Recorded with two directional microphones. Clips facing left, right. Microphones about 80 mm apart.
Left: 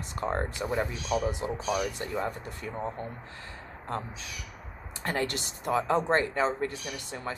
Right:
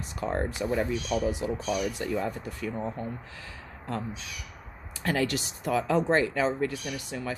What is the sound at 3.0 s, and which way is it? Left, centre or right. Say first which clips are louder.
Speech: right 2 dB; left.